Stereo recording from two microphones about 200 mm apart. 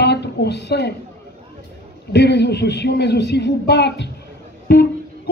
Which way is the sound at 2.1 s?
55° left (ahead or behind).